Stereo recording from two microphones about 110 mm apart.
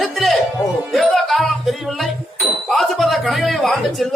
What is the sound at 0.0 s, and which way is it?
Music, centre (ahead or behind).